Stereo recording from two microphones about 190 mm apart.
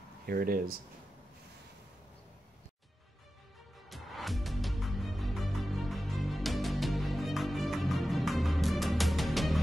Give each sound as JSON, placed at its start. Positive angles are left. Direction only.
{"t": 0.3, "sound": "speech", "side_deg": -50}
{"t": 3.9, "sound": "music", "side_deg": 0}